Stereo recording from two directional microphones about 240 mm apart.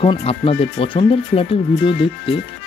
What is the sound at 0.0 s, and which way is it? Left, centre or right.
Speech, left.